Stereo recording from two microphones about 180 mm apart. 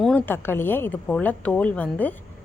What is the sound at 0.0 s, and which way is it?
A woman's voice, 10° left (ahead or behind).